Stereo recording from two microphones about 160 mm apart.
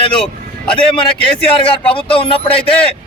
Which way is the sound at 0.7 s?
35° left (ahead or behind).